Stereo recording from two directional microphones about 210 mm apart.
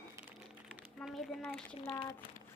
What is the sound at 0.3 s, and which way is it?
Music, 5° right (ahead or behind).